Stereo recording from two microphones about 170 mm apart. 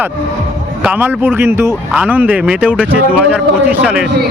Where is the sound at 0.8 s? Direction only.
10° right (ahead or behind).